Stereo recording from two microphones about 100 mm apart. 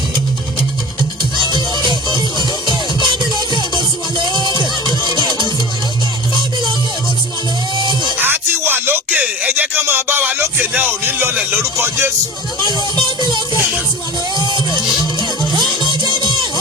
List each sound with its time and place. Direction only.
1.5 s music: 45° right (ahead or behind)
4.3 s music: 40° left (ahead or behind)
8.2 s music: 20° right (ahead or behind)
14.3 s music: 45° left (ahead or behind)
15.8 s music: 45° left (ahead or behind)